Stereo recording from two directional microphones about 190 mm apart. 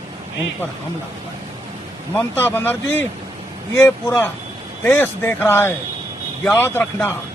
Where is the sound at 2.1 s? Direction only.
10° left (ahead or behind).